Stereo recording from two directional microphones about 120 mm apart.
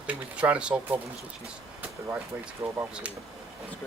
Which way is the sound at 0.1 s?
10° right (ahead or behind).